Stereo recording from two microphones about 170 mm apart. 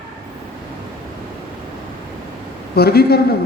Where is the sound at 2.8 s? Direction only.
65° left (ahead or behind).